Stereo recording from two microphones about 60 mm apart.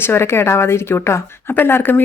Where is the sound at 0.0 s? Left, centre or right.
Left.